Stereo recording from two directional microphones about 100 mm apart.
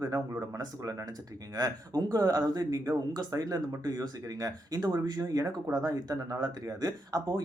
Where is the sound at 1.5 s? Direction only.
40° right (ahead or behind).